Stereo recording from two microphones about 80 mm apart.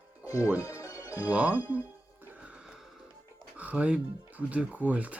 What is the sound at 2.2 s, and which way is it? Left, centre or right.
Snort, centre.